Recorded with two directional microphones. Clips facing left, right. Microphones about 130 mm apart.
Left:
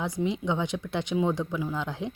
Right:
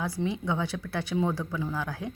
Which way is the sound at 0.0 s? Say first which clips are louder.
Left 2 dB; 20° left (ahead or behind).